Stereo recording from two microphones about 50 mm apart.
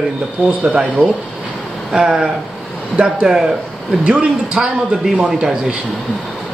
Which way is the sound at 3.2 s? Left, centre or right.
Centre.